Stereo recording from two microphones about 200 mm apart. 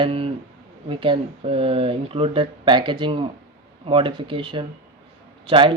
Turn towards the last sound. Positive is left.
turn(degrees=-25)  # may be behind; listen again after turning